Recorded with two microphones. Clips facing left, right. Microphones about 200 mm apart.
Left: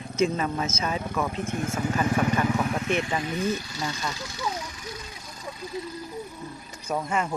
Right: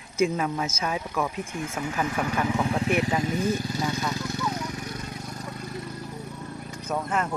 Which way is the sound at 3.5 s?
50° right (ahead or behind).